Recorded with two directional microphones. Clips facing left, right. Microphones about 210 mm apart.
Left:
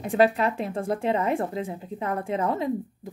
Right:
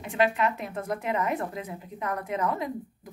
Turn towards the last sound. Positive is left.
turn(degrees=30)  # may be behind; listen again after turning